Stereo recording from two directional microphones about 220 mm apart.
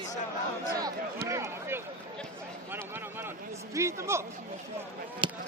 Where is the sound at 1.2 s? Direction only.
15° right (ahead or behind).